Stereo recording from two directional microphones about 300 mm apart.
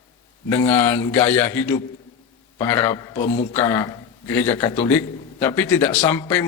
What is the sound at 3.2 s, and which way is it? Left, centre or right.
Speech, left.